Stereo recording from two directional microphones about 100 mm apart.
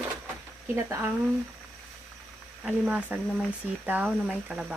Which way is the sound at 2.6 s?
10° right (ahead or behind).